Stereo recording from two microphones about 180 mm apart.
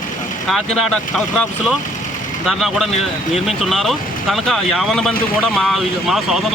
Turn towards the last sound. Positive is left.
turn(degrees=0)  # may be behind; listen again after turning